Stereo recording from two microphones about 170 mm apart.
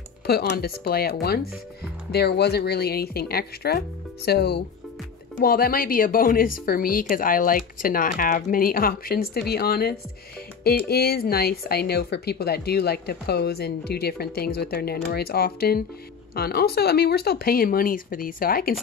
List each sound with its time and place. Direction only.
0.3 s speech: 70° left (ahead or behind)
2.1 s speech: 75° left (ahead or behind)